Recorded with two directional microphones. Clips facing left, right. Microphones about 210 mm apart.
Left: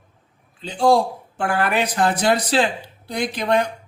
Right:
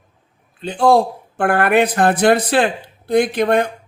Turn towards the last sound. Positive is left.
turn(degrees=-55)  # may be behind; listen again after turning